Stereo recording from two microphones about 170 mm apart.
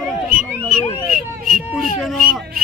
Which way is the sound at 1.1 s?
55° right (ahead or behind).